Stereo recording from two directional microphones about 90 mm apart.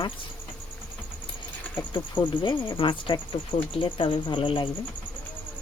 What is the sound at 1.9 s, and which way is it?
Speech, 60° left (ahead or behind).